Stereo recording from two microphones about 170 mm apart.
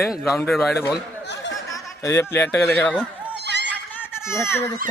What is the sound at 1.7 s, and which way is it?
Speech, 20° left (ahead or behind).